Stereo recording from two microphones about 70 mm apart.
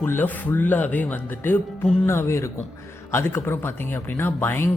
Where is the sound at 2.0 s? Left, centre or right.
Left.